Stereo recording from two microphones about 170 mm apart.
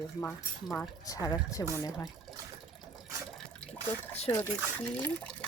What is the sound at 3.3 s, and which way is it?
Water, 5° left (ahead or behind).